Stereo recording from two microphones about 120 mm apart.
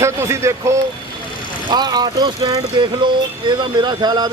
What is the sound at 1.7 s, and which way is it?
Speech, 35° right (ahead or behind).